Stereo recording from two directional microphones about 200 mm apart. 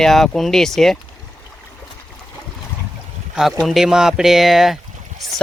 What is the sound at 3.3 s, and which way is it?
Speech, centre (ahead or behind).